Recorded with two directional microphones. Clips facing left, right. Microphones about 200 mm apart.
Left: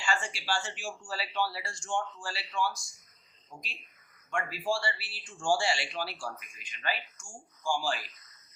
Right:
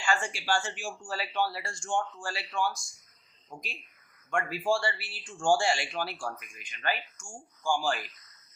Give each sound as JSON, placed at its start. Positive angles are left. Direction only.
{"t": 0.0, "sound": "speech", "side_deg": -50}
{"t": 4.3, "sound": "speech", "side_deg": -50}